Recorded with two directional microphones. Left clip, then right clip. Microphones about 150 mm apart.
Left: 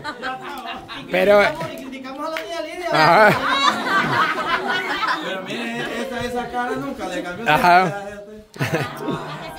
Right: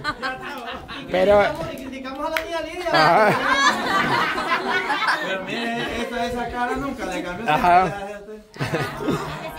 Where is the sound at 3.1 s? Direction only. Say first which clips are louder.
Left 6 dB; 30° left (ahead or behind).